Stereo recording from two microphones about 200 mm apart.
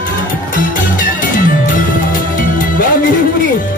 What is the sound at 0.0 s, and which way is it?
Music, 40° left (ahead or behind).